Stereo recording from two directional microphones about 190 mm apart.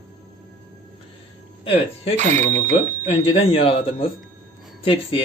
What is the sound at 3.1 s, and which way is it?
Speech, 30° left (ahead or behind).